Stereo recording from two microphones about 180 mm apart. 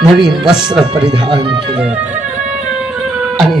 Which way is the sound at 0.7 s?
25° right (ahead or behind).